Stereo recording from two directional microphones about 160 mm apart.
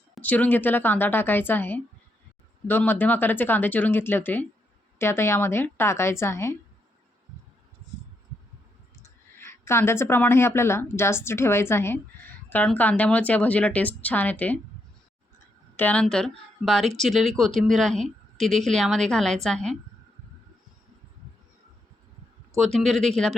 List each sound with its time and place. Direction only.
0.2 s speech: 10° left (ahead or behind)
9.0 s speech: 15° left (ahead or behind)
15.7 s a woman's voice: 10° left (ahead or behind)
22.5 s speech: centre (ahead or behind)